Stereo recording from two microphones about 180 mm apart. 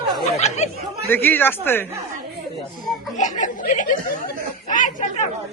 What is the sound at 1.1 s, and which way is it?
Speech, 10° left (ahead or behind).